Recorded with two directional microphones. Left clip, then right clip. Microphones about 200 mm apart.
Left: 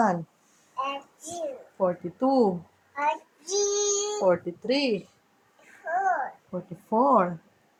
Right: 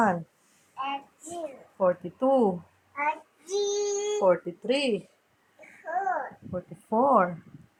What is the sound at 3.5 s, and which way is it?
Child singing, 15° left (ahead or behind).